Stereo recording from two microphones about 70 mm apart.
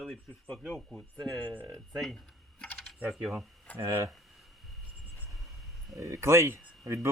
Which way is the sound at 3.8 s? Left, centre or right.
Right.